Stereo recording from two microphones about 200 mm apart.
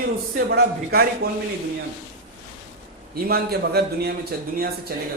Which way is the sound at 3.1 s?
50° right (ahead or behind).